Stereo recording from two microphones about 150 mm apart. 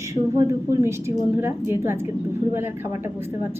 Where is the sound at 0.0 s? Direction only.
20° right (ahead or behind).